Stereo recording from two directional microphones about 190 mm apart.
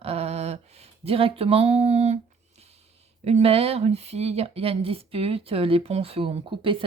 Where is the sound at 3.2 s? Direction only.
30° right (ahead or behind).